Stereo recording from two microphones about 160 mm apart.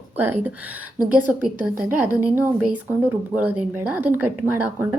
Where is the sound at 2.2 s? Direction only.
15° right (ahead or behind).